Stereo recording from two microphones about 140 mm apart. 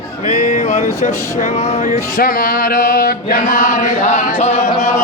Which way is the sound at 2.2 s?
80° left.